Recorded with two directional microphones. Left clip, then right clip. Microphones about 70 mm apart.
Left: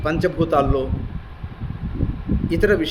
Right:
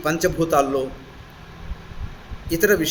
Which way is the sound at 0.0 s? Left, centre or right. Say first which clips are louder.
Even; centre.